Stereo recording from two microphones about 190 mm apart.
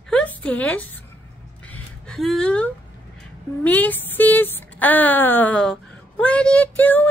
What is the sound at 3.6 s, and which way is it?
A woman's voice, 10° left (ahead or behind).